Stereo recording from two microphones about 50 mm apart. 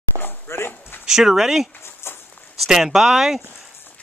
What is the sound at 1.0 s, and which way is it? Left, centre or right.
Speech, centre.